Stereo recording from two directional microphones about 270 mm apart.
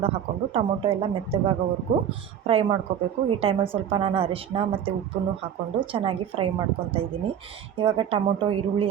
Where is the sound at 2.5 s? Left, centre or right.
Right.